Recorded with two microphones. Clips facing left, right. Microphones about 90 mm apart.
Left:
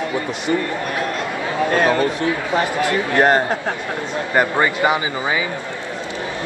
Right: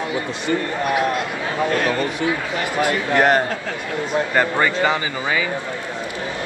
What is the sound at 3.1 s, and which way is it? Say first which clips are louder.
Speech: left 1 dB; 20° left (ahead or behind).